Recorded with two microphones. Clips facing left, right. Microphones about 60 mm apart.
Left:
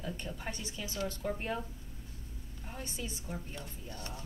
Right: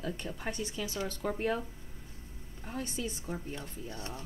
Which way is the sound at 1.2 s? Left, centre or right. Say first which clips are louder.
Right 7 dB; right.